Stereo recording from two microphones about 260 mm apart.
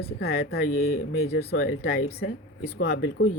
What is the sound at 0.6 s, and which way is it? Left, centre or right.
Speech, left.